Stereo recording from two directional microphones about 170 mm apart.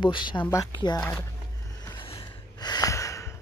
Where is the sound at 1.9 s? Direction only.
30° left (ahead or behind).